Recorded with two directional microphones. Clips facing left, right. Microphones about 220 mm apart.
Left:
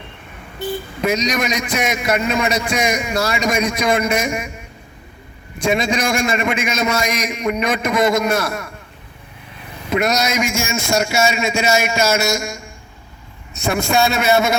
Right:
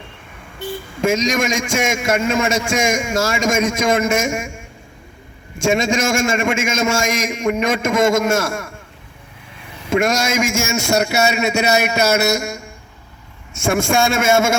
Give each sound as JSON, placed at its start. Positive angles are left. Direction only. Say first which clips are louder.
{"t": 1.0, "sound": "a man's voice", "louder": "right 2 dB", "side_deg": -45}
{"t": 9.9, "sound": "a man's voice", "louder": "right 1 dB", "side_deg": -50}
{"t": 11.0, "sound": "a man's voice", "louder": "right 1 dB", "side_deg": -60}
{"t": 13.5, "sound": "a man's voice", "louder": "right 1 dB", "side_deg": -50}